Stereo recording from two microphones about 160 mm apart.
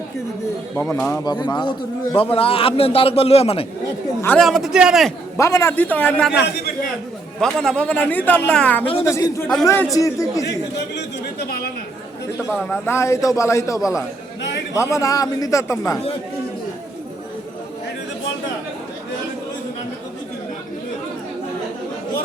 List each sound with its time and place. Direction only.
0.8 s a man's voice: 15° left (ahead or behind); by 3.7 s 40° left (ahead or behind)
4.4 s a man's voice: centre (ahead or behind)
5.4 s a man's voice: 15° left (ahead or behind)
7.4 s a man's voice: 5° left (ahead or behind)
9.0 s a man's voice: 20° left (ahead or behind)
10.4 s speech: 90° left
12.6 s a man's voice: 15° left (ahead or behind)